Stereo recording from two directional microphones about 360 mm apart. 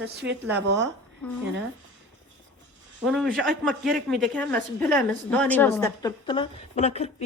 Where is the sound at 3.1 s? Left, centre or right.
Centre.